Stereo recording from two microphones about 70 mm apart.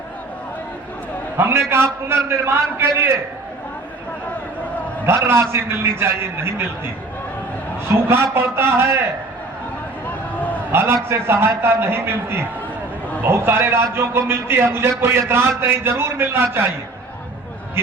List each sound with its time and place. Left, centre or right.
1.4 s a man's voice: right
5.0 s a man's voice: right
10.1 s a sound: left
10.7 s a man's voice: right